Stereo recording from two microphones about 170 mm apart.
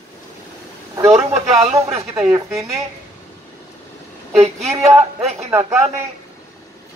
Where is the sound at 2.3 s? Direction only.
20° right (ahead or behind).